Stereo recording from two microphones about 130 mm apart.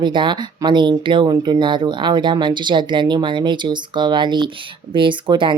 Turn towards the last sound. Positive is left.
turn(degrees=-40)  # may be behind; listen again after turning